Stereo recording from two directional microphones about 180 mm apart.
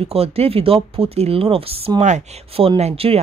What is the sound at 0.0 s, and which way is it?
Speech, 35° right (ahead or behind).